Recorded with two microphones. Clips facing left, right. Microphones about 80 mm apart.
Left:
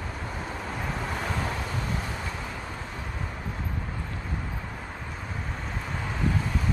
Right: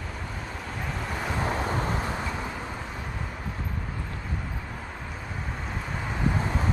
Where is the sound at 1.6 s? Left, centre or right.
Right.